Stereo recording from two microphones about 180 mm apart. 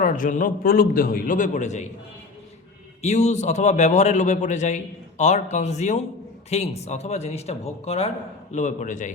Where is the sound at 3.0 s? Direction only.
40° left (ahead or behind).